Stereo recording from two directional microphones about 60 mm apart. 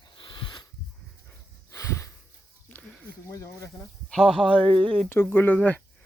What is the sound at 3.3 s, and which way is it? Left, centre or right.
Speech, left.